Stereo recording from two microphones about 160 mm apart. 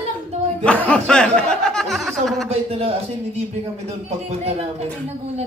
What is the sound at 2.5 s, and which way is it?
Speech, 40° right (ahead or behind).